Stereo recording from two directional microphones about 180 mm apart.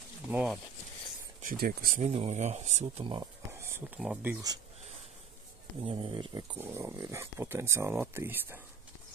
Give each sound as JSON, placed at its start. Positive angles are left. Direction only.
{"t": 0.3, "sound": "speech", "side_deg": -10}
{"t": 1.4, "sound": "speech", "side_deg": -50}
{"t": 2.0, "sound": "speech", "side_deg": -35}
{"t": 3.5, "sound": "a sound", "side_deg": -15}
{"t": 4.0, "sound": "speech", "side_deg": -5}
{"t": 5.8, "sound": "speech", "side_deg": -30}
{"t": 6.6, "sound": "speech", "side_deg": -15}